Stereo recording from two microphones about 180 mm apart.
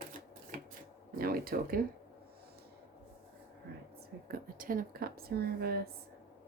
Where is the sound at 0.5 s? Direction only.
50° right (ahead or behind).